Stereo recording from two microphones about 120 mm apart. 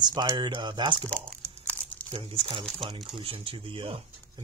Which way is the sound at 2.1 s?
50° right (ahead or behind).